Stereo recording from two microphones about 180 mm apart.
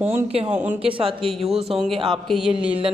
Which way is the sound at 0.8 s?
30° right (ahead or behind).